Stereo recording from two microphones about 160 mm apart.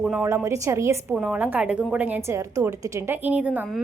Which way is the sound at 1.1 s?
5° right (ahead or behind).